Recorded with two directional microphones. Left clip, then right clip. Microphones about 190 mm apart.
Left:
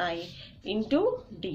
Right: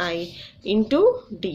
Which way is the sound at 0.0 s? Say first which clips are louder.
Right 5 dB; 35° right (ahead or behind).